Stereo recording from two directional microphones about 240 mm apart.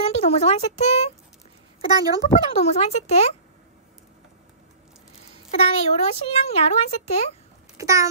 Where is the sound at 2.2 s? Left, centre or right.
Left.